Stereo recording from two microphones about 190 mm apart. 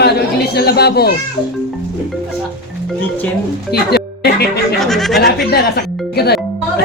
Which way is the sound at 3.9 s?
55° left (ahead or behind).